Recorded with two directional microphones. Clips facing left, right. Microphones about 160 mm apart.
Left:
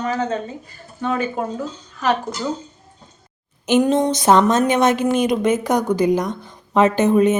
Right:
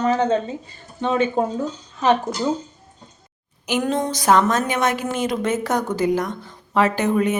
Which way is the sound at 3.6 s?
20° left (ahead or behind).